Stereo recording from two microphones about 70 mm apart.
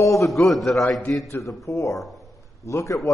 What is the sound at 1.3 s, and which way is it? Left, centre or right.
Speech, left.